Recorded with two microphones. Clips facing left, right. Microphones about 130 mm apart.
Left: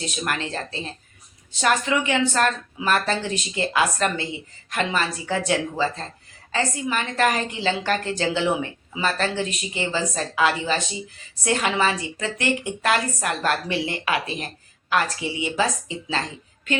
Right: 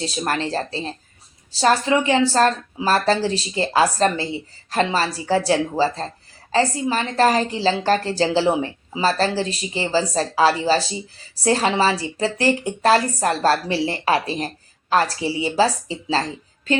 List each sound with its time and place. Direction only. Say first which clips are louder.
0.0 s a woman's voice: right 4 dB; 30° right (ahead or behind)